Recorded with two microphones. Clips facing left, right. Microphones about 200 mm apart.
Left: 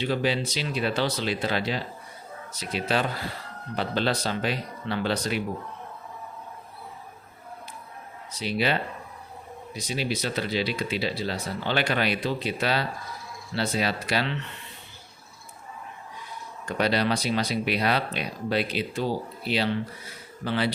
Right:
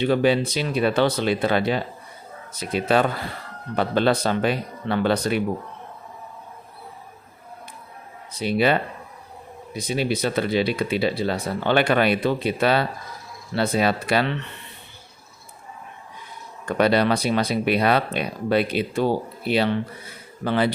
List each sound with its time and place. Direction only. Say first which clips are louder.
0.0 s speech: right 7 dB; 55° right (ahead or behind)
8.3 s speech: right 6 dB; 55° right (ahead or behind)
16.6 s speech: right 6 dB; 55° right (ahead or behind)